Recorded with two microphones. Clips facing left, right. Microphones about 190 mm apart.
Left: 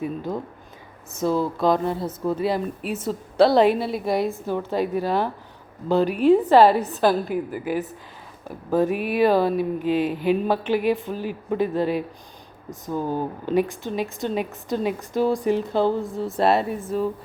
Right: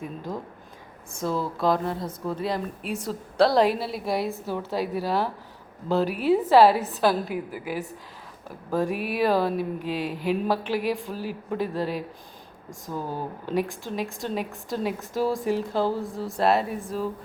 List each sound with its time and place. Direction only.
1.2 s a woman's voice: centre (ahead or behind)
12.9 s speech: 25° left (ahead or behind)
13.4 s a woman's voice: centre (ahead or behind)